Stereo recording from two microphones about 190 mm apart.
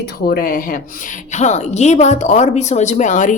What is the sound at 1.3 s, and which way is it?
Speech, 35° left (ahead or behind).